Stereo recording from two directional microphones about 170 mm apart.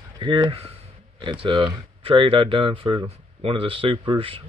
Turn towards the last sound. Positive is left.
turn(degrees=-30)  # may be behind; listen again after turning